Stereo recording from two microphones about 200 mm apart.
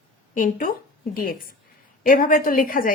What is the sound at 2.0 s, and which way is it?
Speech, 40° left (ahead or behind).